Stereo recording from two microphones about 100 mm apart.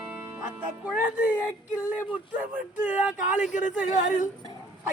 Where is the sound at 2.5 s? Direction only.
15° right (ahead or behind).